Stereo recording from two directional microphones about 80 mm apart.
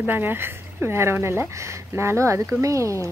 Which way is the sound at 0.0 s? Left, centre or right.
Right.